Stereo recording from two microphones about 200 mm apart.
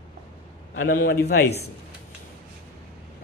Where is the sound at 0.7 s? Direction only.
65° left (ahead or behind).